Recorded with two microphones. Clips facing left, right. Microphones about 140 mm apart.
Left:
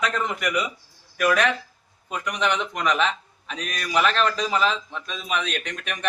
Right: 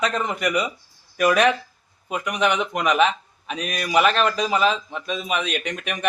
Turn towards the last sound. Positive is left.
turn(degrees=-10)  # may be behind; listen again after turning